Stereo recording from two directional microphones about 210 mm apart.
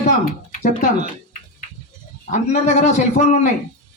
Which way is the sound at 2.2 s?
35° left (ahead or behind).